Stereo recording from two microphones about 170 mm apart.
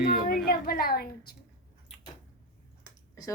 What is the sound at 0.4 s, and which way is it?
Speech, 60° left (ahead or behind).